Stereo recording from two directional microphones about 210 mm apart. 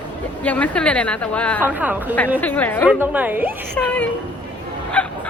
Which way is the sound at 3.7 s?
5° left (ahead or behind).